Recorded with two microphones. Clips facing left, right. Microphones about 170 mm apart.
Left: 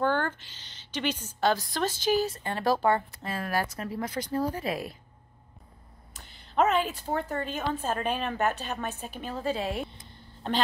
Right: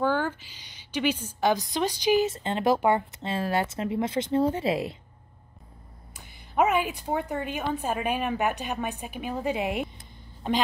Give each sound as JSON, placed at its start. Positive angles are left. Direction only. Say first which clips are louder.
{"t": 0.0, "sound": "a woman's voice", "louder": "right 1 dB", "side_deg": -10}
{"t": 6.1, "sound": "speech", "louder": "right 1 dB", "side_deg": -10}